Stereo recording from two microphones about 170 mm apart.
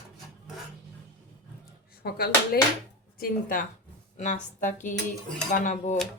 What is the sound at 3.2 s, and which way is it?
Speech, 50° left (ahead or behind).